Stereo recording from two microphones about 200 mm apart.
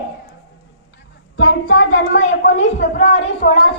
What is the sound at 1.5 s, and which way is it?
Speech, 90° left.